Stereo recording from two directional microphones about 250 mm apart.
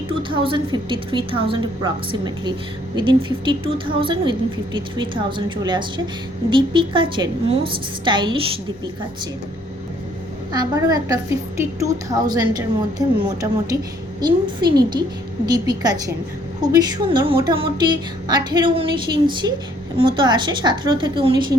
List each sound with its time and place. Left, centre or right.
0.1 s a woman's voice: centre
10.5 s a woman's voice: centre